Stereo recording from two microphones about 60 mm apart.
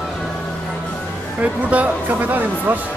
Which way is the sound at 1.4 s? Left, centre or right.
Right.